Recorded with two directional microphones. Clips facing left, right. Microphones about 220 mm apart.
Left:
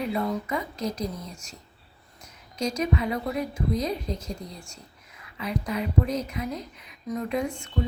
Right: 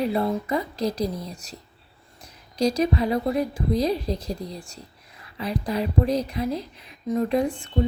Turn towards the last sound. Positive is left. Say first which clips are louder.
# right 6 dB
turn(degrees=-35)  # may be behind; listen again after turning